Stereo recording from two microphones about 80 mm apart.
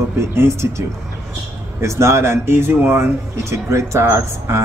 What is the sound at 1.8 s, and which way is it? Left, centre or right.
Speech, right.